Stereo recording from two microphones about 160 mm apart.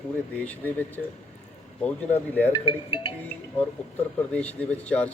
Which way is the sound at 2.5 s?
30° left (ahead or behind).